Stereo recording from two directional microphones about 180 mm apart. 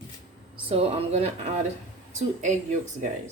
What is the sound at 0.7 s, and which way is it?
Speech, 30° right (ahead or behind).